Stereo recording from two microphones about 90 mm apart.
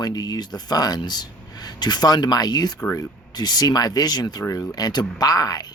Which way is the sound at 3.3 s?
50° left (ahead or behind).